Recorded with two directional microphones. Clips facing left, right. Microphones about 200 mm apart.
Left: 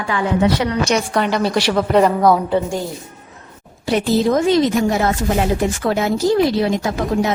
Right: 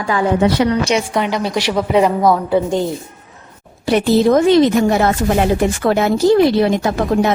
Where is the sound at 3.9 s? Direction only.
65° right (ahead or behind).